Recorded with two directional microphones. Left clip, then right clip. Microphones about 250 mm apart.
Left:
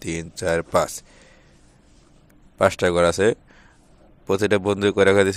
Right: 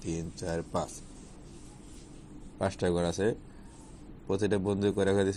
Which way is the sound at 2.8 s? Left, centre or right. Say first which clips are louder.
Left 8 dB; left.